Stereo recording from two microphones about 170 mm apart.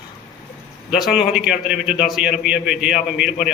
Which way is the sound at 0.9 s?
5° right (ahead or behind).